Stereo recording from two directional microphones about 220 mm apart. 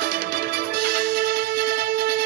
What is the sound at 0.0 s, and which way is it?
Music, 45° right (ahead or behind).